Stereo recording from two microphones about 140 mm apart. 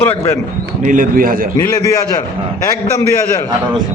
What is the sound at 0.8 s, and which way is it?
Speech, 70° right (ahead or behind).